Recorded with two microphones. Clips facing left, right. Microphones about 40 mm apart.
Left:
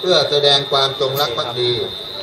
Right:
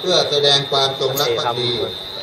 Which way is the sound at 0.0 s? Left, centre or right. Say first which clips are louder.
Left 2 dB; centre.